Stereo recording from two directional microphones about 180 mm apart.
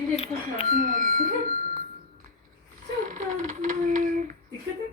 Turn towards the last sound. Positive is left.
turn(degrees=-45)  # may be behind; listen again after turning